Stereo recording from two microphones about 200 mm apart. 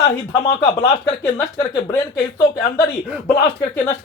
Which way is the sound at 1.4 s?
15° left (ahead or behind).